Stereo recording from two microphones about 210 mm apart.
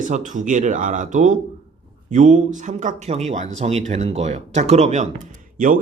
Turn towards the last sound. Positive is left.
turn(degrees=-40)  # may be behind; listen again after turning